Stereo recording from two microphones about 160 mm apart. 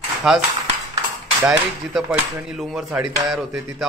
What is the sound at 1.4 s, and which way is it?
Speech, centre (ahead or behind).